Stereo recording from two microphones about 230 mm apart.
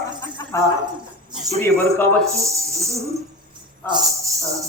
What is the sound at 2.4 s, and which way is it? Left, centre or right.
Speech, centre.